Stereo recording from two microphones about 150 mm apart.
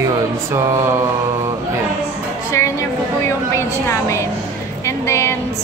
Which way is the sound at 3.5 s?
20° left (ahead or behind).